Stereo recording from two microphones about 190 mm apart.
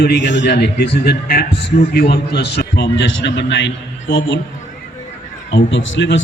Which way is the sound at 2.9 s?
75° left (ahead or behind).